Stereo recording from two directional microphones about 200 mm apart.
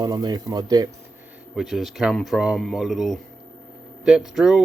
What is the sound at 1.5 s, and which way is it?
Speech, centre (ahead or behind).